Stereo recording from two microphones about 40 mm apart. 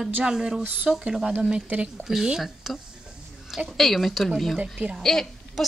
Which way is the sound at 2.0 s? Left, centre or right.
Centre.